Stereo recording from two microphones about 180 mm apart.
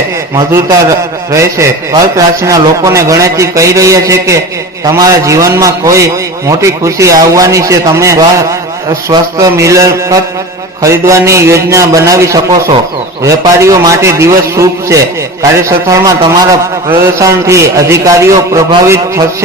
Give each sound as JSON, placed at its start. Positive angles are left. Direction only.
{"t": 0.3, "sound": "a man's voice", "side_deg": -20}